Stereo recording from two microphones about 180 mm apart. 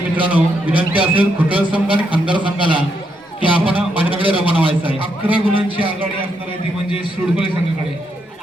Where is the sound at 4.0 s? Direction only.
30° right (ahead or behind).